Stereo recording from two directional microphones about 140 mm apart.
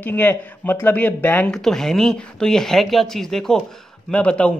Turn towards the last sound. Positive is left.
turn(degrees=10)  # may be behind; listen again after turning